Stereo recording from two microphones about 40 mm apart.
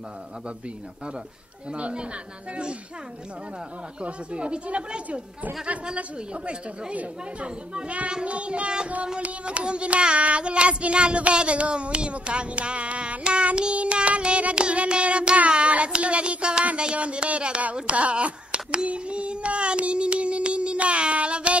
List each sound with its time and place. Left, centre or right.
1.7 s child singing: right
2.5 s speech: right
4.0 s child singing: right
6.9 s speech: right
8.1 s child singing: right